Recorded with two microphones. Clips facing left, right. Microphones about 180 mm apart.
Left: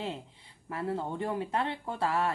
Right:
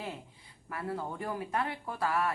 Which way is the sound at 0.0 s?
25° left (ahead or behind).